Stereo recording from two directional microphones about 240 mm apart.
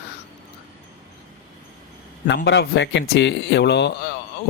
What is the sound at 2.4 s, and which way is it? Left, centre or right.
Speech, left.